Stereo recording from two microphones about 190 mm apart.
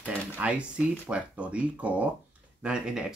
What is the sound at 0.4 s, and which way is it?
Speech, 5° right (ahead or behind).